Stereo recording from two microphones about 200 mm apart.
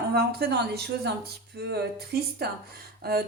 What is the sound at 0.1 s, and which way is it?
A woman's voice, 50° right (ahead or behind).